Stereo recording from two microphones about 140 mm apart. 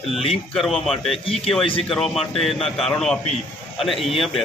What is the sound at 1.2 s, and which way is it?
Speech, 40° left (ahead or behind).